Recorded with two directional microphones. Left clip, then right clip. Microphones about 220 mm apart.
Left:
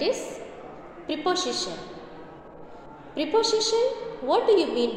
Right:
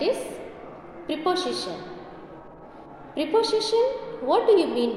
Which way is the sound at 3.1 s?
Centre (ahead or behind).